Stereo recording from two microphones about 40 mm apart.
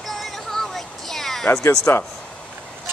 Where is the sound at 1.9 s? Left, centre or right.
Left.